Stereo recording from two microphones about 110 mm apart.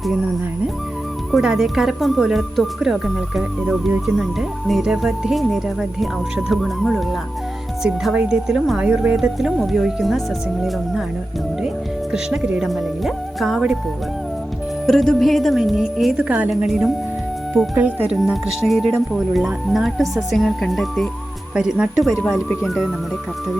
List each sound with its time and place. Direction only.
1.3 s speech: 5° right (ahead or behind)
12.1 s speech: 10° right (ahead or behind)
14.8 s speech: 5° left (ahead or behind)
17.7 s speech: 15° right (ahead or behind)